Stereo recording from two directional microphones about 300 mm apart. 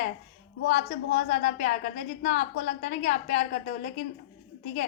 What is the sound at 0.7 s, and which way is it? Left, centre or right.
A woman's voice, left.